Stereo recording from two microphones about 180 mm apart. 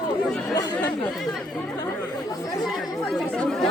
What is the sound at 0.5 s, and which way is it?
Speech, 20° left (ahead or behind).